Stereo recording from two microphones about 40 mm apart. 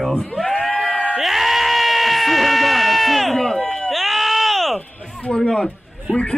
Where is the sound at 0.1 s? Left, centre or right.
Centre.